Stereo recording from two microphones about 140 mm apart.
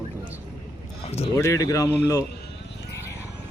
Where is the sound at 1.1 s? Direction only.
45° left (ahead or behind).